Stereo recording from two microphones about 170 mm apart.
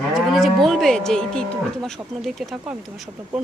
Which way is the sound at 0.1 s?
Centre (ahead or behind).